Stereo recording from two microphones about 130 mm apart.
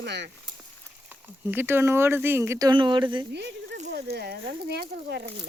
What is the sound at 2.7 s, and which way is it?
Speech, 35° right (ahead or behind).